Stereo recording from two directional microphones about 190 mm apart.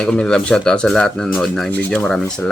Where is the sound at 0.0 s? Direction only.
5° left (ahead or behind).